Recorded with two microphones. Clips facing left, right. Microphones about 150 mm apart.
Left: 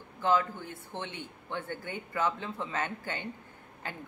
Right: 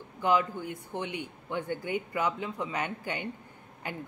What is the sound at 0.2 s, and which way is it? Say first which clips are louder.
Speech: right 1 dB; 15° right (ahead or behind).